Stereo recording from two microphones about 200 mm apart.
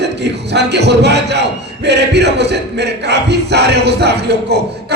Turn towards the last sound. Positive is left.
turn(degrees=-55)  # may be behind; listen again after turning